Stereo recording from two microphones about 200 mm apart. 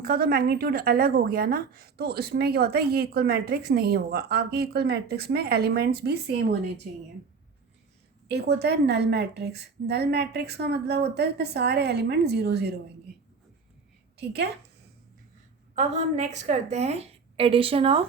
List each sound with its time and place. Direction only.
0.0 s speech: 50° right (ahead or behind)
8.3 s a woman's voice: 55° right (ahead or behind)
15.8 s a woman's voice: 35° right (ahead or behind)